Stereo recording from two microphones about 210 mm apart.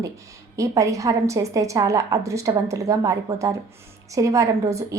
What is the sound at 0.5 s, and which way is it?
A woman's voice, 15° right (ahead or behind).